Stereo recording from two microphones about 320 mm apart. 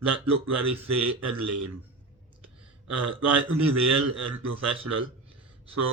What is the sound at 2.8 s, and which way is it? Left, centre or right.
A man's voice, right.